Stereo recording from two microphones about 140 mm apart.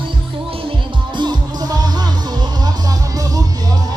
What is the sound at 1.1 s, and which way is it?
Music, 30° right (ahead or behind).